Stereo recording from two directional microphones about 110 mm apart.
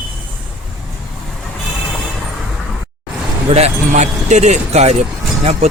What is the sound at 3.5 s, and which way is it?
Speech, 75° right (ahead or behind).